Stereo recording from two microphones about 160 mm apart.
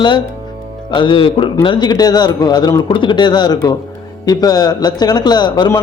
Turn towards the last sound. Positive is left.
turn(degrees=25)  # may be behind; listen again after turning